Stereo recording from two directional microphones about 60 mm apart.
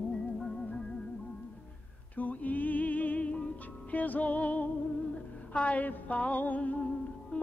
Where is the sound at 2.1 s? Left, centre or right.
Left.